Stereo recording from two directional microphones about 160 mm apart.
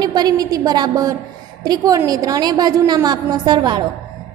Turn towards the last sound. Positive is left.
turn(degrees=-25)  # may be behind; listen again after turning